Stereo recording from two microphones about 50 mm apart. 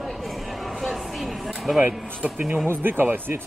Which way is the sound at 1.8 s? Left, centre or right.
Right.